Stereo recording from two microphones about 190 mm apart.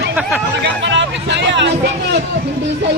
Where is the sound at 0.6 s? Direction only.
70° right (ahead or behind).